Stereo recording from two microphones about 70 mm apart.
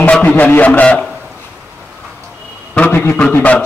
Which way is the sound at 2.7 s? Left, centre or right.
Left.